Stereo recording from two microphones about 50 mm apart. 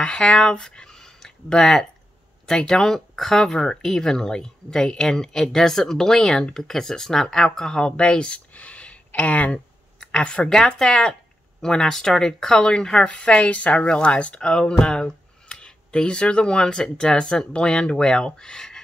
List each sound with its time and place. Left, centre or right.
0.0 s speech: centre